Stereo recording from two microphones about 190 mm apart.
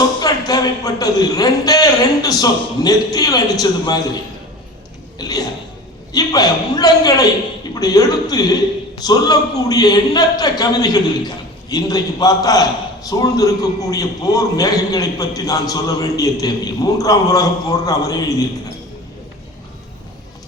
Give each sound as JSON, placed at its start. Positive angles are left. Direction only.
{"t": 0.2, "sound": "a man's voice", "side_deg": 20}
{"t": 5.1, "sound": "a sound", "side_deg": 20}
{"t": 6.1, "sound": "a man's voice", "side_deg": 20}